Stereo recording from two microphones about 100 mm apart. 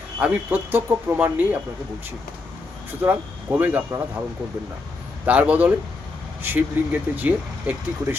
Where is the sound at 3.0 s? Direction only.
15° right (ahead or behind).